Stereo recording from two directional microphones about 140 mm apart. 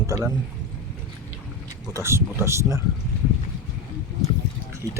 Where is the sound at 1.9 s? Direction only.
20° right (ahead or behind).